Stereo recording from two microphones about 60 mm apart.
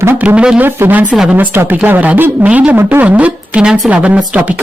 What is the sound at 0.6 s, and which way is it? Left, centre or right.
Speech, right.